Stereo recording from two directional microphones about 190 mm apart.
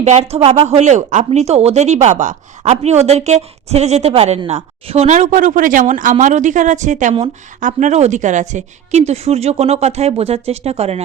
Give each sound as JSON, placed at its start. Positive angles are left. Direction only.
{"t": 0.0, "sound": "a woman's voice", "side_deg": -35}